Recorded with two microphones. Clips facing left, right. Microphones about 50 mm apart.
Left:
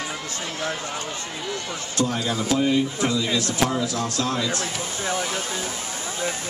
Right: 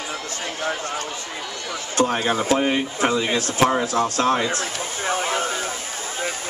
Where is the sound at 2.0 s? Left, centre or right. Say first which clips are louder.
Right 4 dB; right.